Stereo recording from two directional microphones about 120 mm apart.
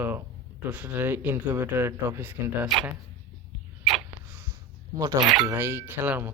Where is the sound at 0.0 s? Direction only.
20° right (ahead or behind).